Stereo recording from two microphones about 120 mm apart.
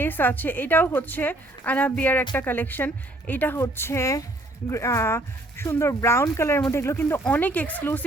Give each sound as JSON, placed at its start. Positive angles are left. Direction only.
{"t": 0.0, "sound": "a woman's voice", "side_deg": 15}